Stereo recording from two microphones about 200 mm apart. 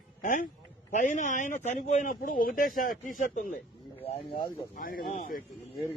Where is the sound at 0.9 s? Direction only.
40° left (ahead or behind).